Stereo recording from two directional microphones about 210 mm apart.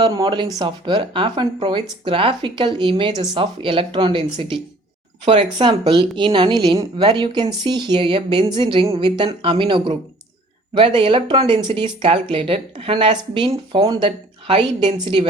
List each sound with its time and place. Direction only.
0.0 s speech: 20° right (ahead or behind)